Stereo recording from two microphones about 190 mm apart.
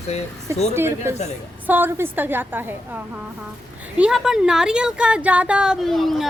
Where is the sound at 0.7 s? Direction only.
15° right (ahead or behind).